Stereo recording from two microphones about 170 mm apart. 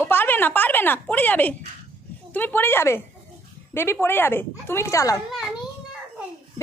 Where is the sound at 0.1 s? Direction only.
10° left (ahead or behind).